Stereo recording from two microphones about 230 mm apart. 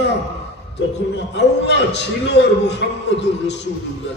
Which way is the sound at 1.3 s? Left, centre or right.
Left.